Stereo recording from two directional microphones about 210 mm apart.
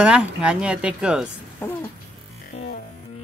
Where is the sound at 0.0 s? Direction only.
5° right (ahead or behind).